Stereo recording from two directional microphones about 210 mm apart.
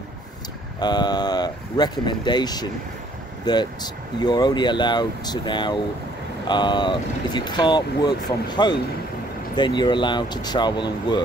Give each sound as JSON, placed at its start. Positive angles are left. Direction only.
{"t": 0.7, "sound": "speech", "side_deg": 20}